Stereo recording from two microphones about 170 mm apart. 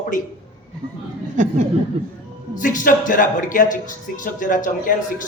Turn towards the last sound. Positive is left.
turn(degrees=50)  # may be behind; listen again after turning